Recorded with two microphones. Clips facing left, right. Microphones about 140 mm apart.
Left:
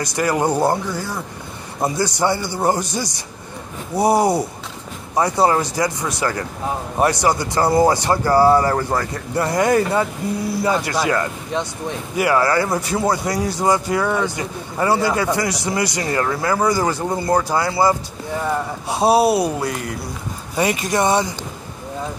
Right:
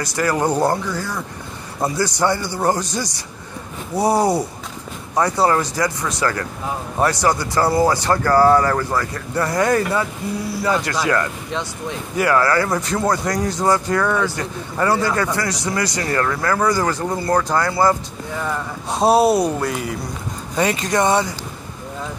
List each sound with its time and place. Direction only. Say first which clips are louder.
0.0 s speech: left 1 dB; 15° left (ahead or behind)
3.9 s speech: left 1 dB; 10° left (ahead or behind)
8.5 s speech: even; 30° left (ahead or behind)
12.8 s speech: even; 5° left (ahead or behind)
14.0 s speech: even; 20° left (ahead or behind); by 20.0 s centre (ahead or behind)
20.5 s speech: even; 15° left (ahead or behind)